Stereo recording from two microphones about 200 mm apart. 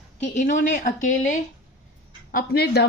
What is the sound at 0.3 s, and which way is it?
Speech, 45° left (ahead or behind).